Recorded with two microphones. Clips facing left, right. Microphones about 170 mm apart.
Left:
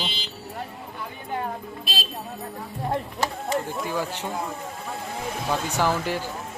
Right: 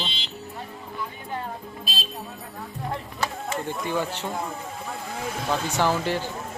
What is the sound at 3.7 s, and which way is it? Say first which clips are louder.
Speech: right 1 dB; 5° left (ahead or behind).